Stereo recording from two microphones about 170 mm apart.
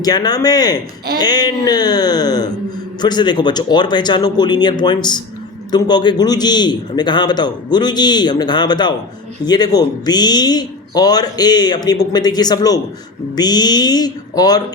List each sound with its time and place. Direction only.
0.0 s speech: 25° left (ahead or behind)